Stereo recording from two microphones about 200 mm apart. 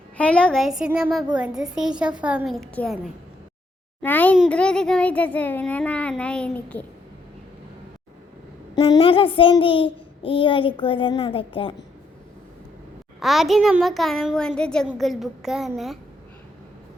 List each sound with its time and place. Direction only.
0.2 s a woman's voice: 5° left (ahead or behind)
4.0 s a child's voice: 10° left (ahead or behind)
8.7 s a child's voice: 25° left (ahead or behind)
13.1 s a woman's voice: centre (ahead or behind)